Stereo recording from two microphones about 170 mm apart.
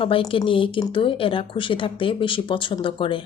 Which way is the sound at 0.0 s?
30° left (ahead or behind).